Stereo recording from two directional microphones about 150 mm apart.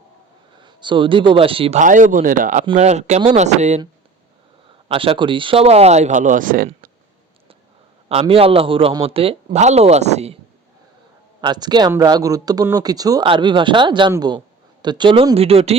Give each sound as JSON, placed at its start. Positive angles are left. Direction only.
{"t": 0.5, "sound": "speech", "side_deg": -30}
{"t": 1.8, "sound": "speech", "side_deg": -60}
{"t": 2.7, "sound": "speech", "side_deg": -50}
{"t": 4.9, "sound": "speech", "side_deg": -35}
{"t": 8.1, "sound": "a man's voice", "side_deg": -40}
{"t": 11.3, "sound": "a man's voice", "side_deg": -30}